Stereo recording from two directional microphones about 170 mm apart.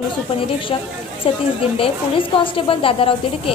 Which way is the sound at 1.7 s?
30° left (ahead or behind).